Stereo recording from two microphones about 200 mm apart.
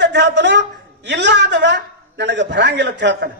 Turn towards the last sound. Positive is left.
turn(degrees=-60)  # may be behind; listen again after turning